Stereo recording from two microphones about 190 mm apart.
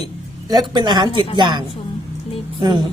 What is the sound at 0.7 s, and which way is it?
Speech, 20° right (ahead or behind).